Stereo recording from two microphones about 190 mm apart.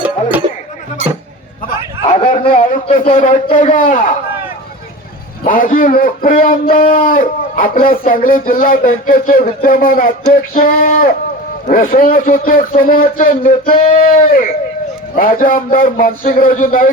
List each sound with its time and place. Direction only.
0.0 s music: 10° right (ahead or behind)
2.2 s a man's voice: 45° left (ahead or behind)
5.4 s speech: 45° left (ahead or behind)